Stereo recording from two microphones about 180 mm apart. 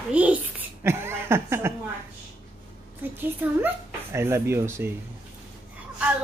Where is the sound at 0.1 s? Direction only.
10° right (ahead or behind).